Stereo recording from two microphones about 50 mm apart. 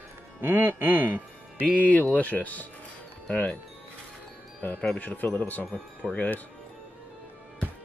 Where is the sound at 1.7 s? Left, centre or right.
Left.